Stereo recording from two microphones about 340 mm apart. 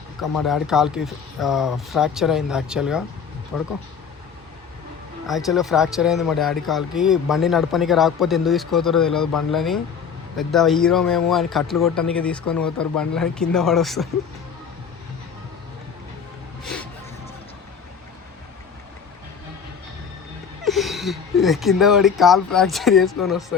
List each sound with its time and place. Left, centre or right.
0.2 s speech: centre
5.2 s speech: centre
20.7 s speech: centre